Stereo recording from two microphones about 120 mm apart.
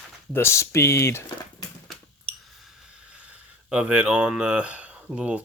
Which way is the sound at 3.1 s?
10° right (ahead or behind).